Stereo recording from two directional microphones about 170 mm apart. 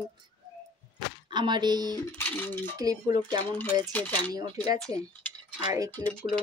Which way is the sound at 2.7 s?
20° right (ahead or behind).